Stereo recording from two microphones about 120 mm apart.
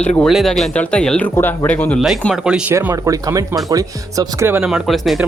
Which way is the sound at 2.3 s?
5° right (ahead or behind).